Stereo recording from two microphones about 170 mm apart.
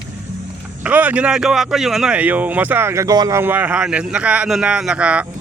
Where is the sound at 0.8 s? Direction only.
10° right (ahead or behind).